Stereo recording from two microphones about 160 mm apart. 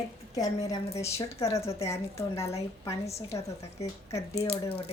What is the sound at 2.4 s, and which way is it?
Speech, 40° left (ahead or behind).